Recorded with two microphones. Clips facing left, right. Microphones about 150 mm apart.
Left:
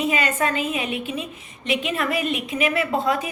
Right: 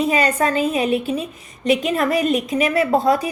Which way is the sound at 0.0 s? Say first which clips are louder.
Right 4 dB; 35° right (ahead or behind).